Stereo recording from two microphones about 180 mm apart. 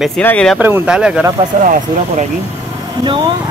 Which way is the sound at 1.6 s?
45° right (ahead or behind).